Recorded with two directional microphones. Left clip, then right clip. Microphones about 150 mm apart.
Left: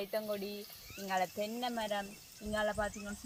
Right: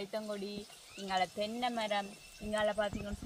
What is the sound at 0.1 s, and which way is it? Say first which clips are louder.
Speech: left 4 dB; 65° left (ahead or behind).